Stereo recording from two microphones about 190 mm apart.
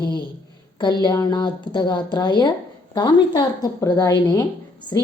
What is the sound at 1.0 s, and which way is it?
A woman's voice, 20° left (ahead or behind).